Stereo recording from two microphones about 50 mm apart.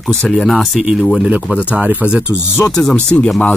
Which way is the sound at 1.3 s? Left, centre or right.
Right.